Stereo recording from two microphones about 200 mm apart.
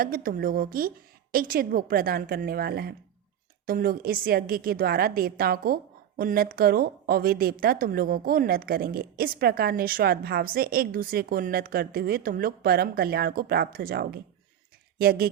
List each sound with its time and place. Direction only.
0.0 s a woman's voice: 45° right (ahead or behind)